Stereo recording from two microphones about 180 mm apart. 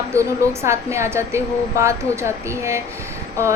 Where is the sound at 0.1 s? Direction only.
15° right (ahead or behind).